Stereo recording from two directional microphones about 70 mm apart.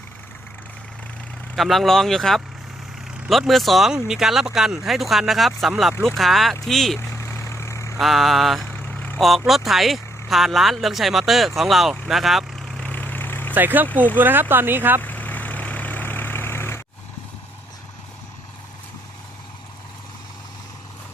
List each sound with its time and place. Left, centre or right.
1.5 s speech: centre
7.0 s vehicle: left
7.9 s speech: centre
8.6 s vehicle: left
9.1 s speech: centre
12.8 s vehicle: left
13.5 s speech: right
15.0 s vehicle: left